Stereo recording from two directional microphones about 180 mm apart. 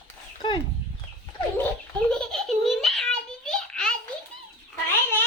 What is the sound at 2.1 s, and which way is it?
Giggle, 5° left (ahead or behind).